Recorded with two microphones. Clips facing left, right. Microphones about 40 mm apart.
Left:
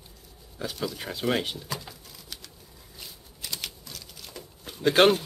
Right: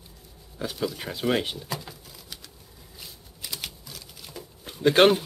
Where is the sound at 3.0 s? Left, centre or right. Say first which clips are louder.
Even; centre.